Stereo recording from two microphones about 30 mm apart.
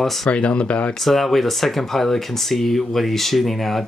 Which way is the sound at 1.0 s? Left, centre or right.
Centre.